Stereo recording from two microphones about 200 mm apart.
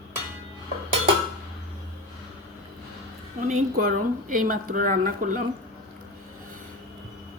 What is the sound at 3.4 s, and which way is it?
Speech, 40° right (ahead or behind).